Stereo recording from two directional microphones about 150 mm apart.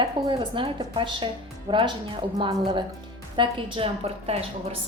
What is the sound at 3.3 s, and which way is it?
A woman's voice, 35° right (ahead or behind).